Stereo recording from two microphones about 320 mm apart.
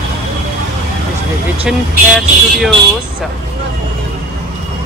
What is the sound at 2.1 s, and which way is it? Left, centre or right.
Speech, centre.